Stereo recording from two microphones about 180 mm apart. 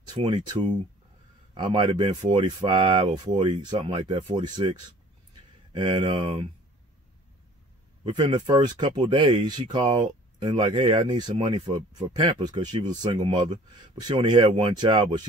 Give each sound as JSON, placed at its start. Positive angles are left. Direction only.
{"t": 0.1, "sound": "speech", "side_deg": -25}
{"t": 8.3, "sound": "speech", "side_deg": -25}